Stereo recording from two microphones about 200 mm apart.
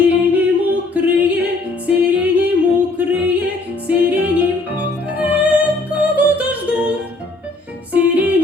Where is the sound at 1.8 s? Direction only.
5° right (ahead or behind).